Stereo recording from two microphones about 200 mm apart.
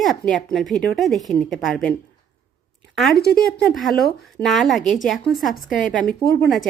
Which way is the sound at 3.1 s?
50° left (ahead or behind).